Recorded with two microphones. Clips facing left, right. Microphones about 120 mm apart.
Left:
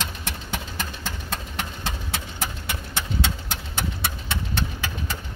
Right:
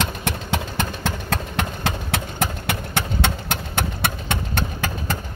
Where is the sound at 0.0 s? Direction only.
70° right (ahead or behind).